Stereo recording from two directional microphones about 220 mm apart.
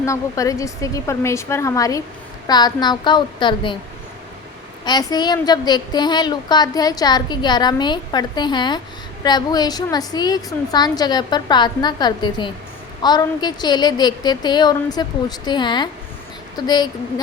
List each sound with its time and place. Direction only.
0.0 s a woman's voice: 15° left (ahead or behind)
4.9 s a woman's voice: 20° left (ahead or behind)